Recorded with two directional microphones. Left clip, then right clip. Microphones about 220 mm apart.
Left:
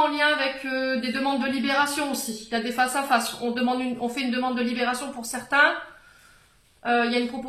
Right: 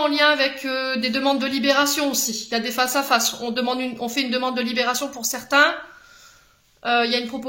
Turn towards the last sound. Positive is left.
turn(degrees=-50)  # may be behind; listen again after turning